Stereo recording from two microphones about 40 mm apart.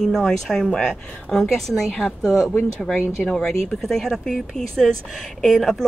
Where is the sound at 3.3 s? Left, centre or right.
Left.